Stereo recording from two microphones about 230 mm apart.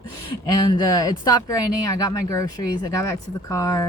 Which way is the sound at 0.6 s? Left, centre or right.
Centre.